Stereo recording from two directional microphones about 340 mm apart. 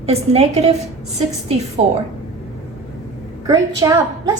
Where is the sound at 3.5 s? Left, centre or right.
Centre.